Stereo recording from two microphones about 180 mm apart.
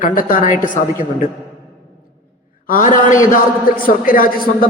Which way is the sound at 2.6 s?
45° left (ahead or behind).